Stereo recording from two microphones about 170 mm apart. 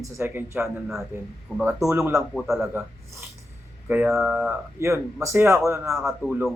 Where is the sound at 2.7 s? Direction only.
15° right (ahead or behind).